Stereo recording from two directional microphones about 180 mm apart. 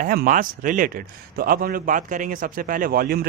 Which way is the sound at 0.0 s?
50° right (ahead or behind).